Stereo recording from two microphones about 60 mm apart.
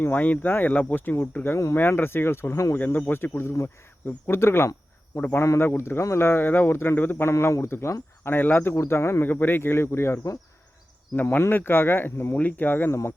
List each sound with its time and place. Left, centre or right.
0.0 s speech: left
1.2 s speech: left
1.5 s speech: left
1.7 s speech: left
2.7 s speech: left
5.1 s speech: left
5.6 s speech: left
7.3 s speech: left
8.2 s speech: left
8.7 s speech: left
9.2 s speech: left
11.1 s speech: left